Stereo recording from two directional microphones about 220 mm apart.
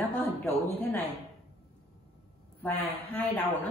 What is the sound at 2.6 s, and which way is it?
Speech, 10° left (ahead or behind).